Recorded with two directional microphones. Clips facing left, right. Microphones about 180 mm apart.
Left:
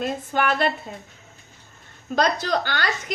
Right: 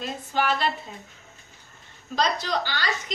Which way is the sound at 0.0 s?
55° left (ahead or behind).